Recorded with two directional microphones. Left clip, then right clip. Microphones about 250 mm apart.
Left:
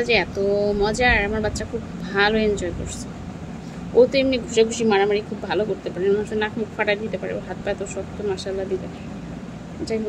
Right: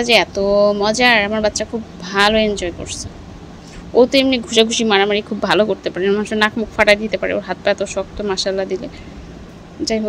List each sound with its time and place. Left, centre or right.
0.0 s speech: centre